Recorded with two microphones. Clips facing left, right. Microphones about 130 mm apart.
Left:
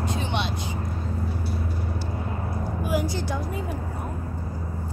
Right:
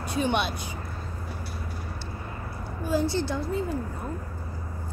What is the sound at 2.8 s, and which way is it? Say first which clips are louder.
Speech: right 2 dB; 15° left (ahead or behind).